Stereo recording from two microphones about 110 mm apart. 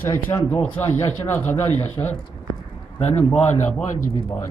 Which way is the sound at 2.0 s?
35° left (ahead or behind).